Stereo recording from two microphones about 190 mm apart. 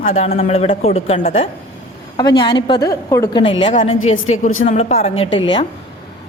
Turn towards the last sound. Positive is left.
turn(degrees=25)  # may be behind; listen again after turning